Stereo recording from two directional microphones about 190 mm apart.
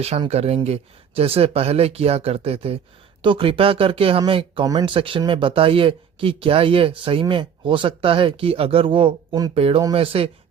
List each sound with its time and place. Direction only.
0.0 s speech: 35° right (ahead or behind)